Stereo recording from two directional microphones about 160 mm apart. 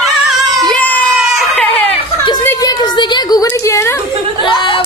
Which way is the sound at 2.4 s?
20° left (ahead or behind).